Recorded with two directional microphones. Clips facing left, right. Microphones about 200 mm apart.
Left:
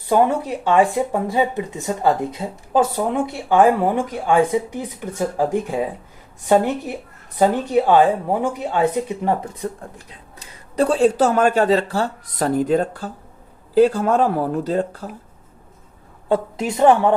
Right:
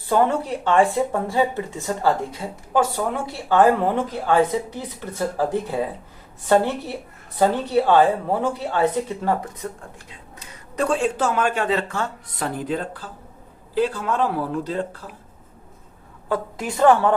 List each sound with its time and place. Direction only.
0.1 s speech: 10° left (ahead or behind)
10.8 s speech: 35° left (ahead or behind)
16.3 s a woman's voice: 25° left (ahead or behind)